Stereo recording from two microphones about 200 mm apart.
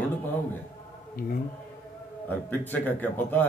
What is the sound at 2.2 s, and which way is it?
A man's voice, 10° left (ahead or behind).